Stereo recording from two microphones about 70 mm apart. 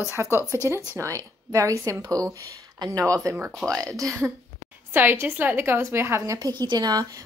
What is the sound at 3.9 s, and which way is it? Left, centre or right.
Speech, right.